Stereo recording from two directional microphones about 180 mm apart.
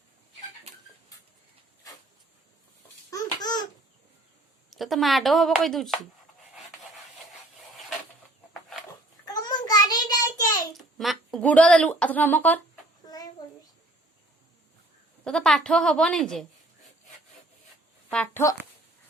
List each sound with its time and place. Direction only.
3.1 s babbling: 20° left (ahead or behind)
4.7 s speech: centre (ahead or behind)
8.9 s a sound: 20° left (ahead or behind)
10.8 s a sound: centre (ahead or behind)
13.0 s child singing: 20° left (ahead or behind)
15.2 s speech: 5° left (ahead or behind)
18.1 s speech: 5° left (ahead or behind)